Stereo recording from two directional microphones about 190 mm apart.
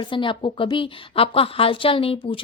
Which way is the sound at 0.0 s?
25° left (ahead or behind).